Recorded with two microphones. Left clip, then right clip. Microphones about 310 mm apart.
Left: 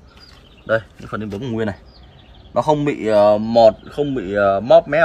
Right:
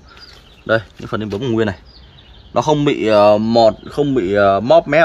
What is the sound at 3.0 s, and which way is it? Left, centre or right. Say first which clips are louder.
Speech: right 3 dB; right.